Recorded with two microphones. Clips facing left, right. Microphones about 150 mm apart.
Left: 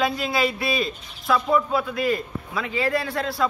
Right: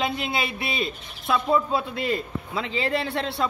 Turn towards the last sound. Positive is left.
turn(degrees=-25)  # may be behind; listen again after turning